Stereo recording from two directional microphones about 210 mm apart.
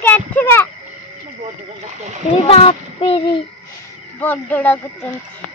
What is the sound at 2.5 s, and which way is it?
Child singing, 25° left (ahead or behind).